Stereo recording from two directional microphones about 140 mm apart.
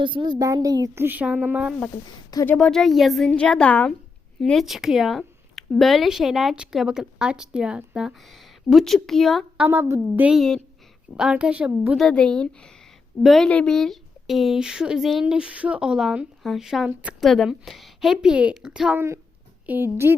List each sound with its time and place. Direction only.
0.0 s a woman's voice: 35° right (ahead or behind)
1.0 s a woman's voice: 10° right (ahead or behind)
2.5 s a woman's voice: 5° left (ahead or behind)
9.6 s a woman's voice: 15° right (ahead or behind)
10.2 s a woman's voice: 5° right (ahead or behind)
11.9 s a woman's voice: 5° left (ahead or behind)
18.9 s a woman's voice: 20° right (ahead or behind)